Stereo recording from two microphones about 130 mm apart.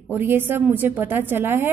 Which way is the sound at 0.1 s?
15° right (ahead or behind).